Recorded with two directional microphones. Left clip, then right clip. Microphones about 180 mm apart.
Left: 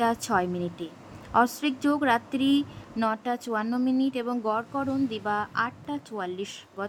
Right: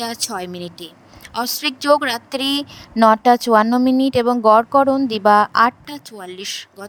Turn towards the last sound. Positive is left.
turn(degrees=-55)  # may be behind; listen again after turning